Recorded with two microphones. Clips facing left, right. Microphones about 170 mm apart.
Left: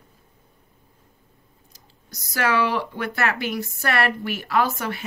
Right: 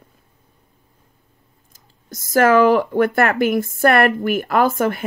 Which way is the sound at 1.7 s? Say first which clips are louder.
Right 9 dB; 50° right (ahead or behind).